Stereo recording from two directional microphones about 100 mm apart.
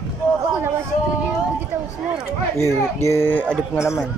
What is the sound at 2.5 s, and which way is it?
Speech, 30° left (ahead or behind).